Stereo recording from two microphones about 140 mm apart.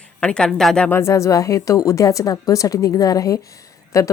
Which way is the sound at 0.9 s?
20° left (ahead or behind).